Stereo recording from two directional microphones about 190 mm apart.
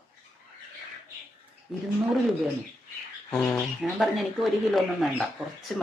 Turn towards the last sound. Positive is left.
turn(degrees=0)  # may be behind; listen again after turning